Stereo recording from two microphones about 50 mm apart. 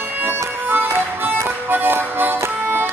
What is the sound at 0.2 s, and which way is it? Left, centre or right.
Music, right.